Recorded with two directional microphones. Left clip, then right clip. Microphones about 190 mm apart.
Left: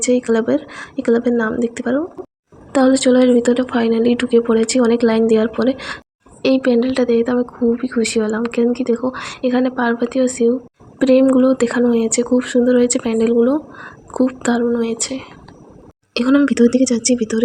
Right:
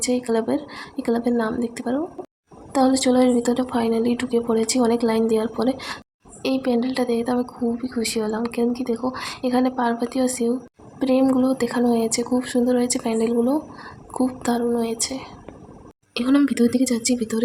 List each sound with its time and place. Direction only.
0.0 s a woman's voice: 20° left (ahead or behind)